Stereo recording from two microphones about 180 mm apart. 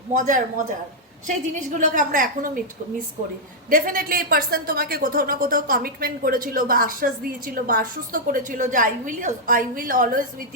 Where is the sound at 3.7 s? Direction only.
50° right (ahead or behind).